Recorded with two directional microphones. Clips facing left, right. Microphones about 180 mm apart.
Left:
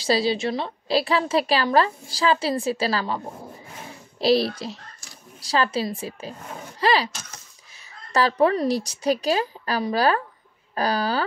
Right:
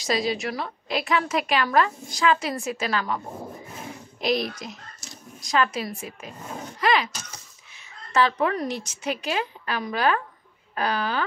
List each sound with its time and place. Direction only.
0.0 s a woman's voice: 30° left (ahead or behind)
4.2 s a woman's voice: 30° left (ahead or behind)
8.1 s a woman's voice: 35° left (ahead or behind)